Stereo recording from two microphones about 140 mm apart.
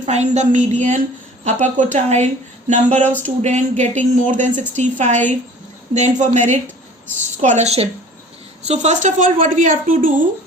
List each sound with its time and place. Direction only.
0.1 s a woman's voice: 55° right (ahead or behind); by 10.1 s 75° right (ahead or behind)